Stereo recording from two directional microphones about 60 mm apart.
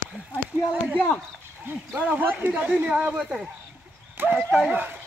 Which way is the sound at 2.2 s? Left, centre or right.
Right.